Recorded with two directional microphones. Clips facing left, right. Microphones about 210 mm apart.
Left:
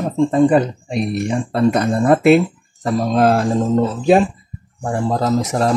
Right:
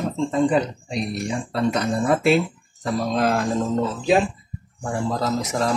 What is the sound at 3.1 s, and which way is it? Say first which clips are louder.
Speech: left 7 dB; 45° left (ahead or behind).